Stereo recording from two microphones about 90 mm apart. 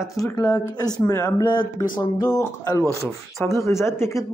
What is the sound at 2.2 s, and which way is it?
Speech, 30° left (ahead or behind).